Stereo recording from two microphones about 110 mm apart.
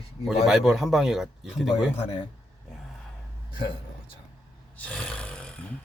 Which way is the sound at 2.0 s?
60° left (ahead or behind).